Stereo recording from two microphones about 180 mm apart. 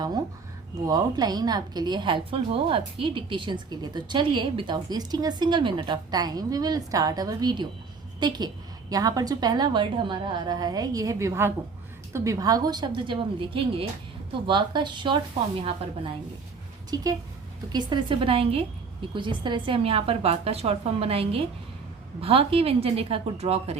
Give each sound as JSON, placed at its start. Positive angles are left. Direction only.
{"t": 0.9, "sound": "a woman's voice", "side_deg": -20}
{"t": 16.9, "sound": "a woman's voice", "side_deg": -20}